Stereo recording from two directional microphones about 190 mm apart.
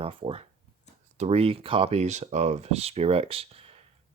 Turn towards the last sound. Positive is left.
turn(degrees=-30)  # may be behind; listen again after turning